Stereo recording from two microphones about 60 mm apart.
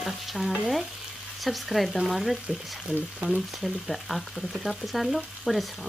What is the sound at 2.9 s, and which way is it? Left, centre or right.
Frying, right.